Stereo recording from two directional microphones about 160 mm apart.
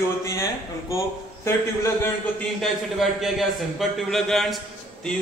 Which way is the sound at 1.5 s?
15° left (ahead or behind).